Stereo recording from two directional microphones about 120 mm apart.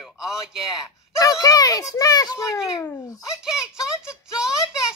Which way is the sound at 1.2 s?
30° left (ahead or behind).